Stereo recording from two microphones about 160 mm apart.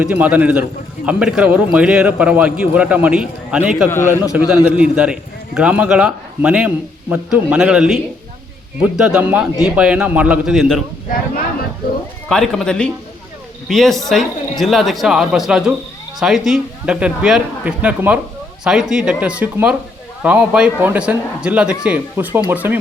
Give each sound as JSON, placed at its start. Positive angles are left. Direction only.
{"t": 0.0, "sound": "a man's voice", "side_deg": -10}
{"t": 3.9, "sound": "a man's voice", "side_deg": 15}
{"t": 4.2, "sound": "a man's voice", "side_deg": -5}
{"t": 12.3, "sound": "a man's voice", "side_deg": 5}